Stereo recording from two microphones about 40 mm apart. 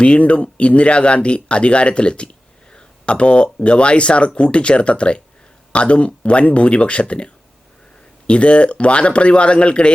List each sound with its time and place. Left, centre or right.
0.0 s speech: left
8.3 s speech: left